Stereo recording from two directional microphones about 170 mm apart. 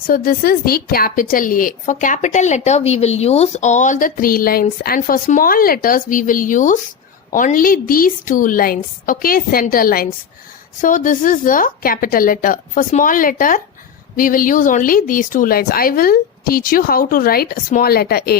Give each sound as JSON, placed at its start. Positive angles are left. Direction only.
{"t": 0.1, "sound": "a woman's voice", "side_deg": 60}